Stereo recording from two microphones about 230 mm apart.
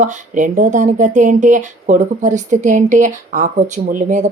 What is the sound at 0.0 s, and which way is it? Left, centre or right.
Speech, right.